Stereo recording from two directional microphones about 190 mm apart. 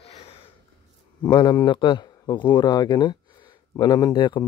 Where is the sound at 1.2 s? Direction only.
20° left (ahead or behind).